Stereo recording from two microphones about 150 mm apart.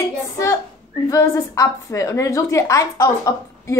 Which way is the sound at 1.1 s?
20° left (ahead or behind).